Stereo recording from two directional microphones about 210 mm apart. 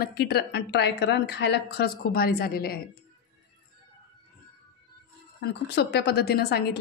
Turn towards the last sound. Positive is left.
turn(degrees=50)  # may be behind; listen again after turning